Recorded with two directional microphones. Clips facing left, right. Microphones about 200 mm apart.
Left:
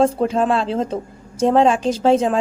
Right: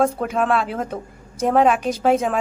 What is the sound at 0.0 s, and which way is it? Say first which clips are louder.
A woman's voice: left 3 dB; 25° left (ahead or behind).